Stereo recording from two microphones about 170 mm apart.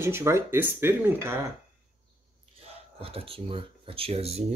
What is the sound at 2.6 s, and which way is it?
Speech, 35° right (ahead or behind).